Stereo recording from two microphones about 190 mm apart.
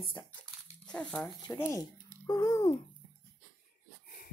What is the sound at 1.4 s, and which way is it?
A woman's voice, 15° left (ahead or behind).